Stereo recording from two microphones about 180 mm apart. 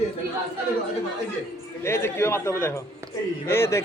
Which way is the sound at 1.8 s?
15° left (ahead or behind).